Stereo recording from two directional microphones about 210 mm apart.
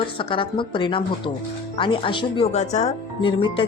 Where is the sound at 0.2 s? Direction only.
25° left (ahead or behind).